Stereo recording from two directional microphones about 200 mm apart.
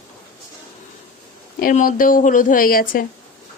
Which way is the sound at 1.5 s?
45° left (ahead or behind).